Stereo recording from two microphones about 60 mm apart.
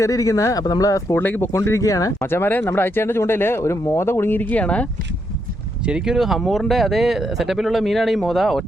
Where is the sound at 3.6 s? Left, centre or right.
Left.